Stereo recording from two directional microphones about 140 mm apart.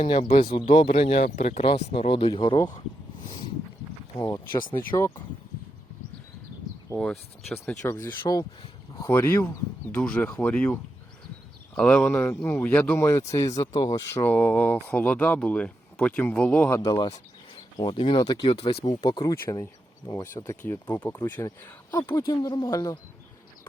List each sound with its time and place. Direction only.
0.1 s speech: 45° left (ahead or behind)
4.9 s speech: 20° left (ahead or behind)
6.9 s speech: 5° left (ahead or behind)
7.8 s speech: 20° left (ahead or behind)
9.0 s speech: 15° left (ahead or behind)
11.8 s speech: 5° left (ahead or behind)
12.0 s speech: 20° left (ahead or behind)
14.2 s speech: 10° left (ahead or behind)
17.7 s speech: 35° left (ahead or behind)
18.5 s speech: 45° left (ahead or behind)
19.0 s speech: 25° left (ahead or behind)